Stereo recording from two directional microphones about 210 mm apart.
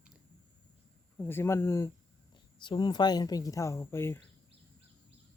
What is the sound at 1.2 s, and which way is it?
Speech, 10° left (ahead or behind).